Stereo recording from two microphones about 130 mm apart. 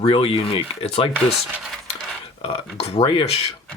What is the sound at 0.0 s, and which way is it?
Speech, 45° left (ahead or behind).